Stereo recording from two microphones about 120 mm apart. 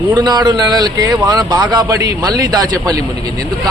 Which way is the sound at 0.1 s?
40° right (ahead or behind).